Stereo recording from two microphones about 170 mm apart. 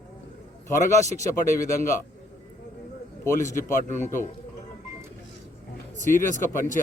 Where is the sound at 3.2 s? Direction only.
15° left (ahead or behind).